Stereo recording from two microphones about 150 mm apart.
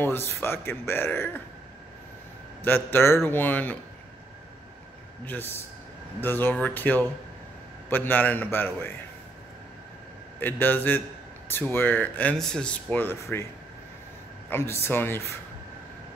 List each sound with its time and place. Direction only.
0.0 s speech: 15° left (ahead or behind)
2.6 s speech: 15° left (ahead or behind)
5.2 s speech: 15° left (ahead or behind)
10.4 s speech: 15° left (ahead or behind)
14.5 s speech: 15° left (ahead or behind)